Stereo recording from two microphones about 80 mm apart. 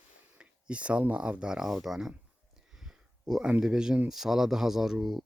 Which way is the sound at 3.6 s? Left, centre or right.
Centre.